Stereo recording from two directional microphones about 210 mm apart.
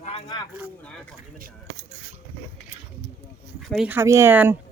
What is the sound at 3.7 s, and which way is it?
Speech, 5° right (ahead or behind).